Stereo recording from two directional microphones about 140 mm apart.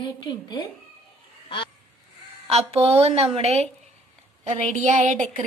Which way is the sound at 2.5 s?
45° right (ahead or behind).